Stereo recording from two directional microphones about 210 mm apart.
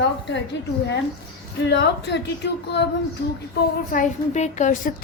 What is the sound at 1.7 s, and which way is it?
Speech, 55° left (ahead or behind).